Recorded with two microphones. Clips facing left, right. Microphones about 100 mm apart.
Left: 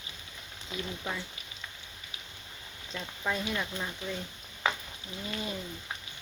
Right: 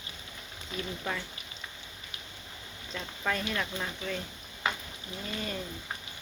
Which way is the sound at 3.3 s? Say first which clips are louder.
Right 1 dB; 10° left (ahead or behind).